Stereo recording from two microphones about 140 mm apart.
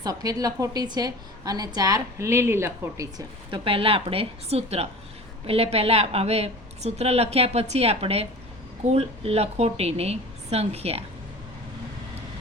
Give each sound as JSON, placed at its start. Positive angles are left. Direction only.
{"t": 0.0, "sound": "a woman's voice", "side_deg": -25}
{"t": 3.5, "sound": "a woman's voice", "side_deg": -40}